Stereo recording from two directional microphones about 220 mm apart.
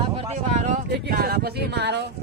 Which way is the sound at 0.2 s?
30° right (ahead or behind).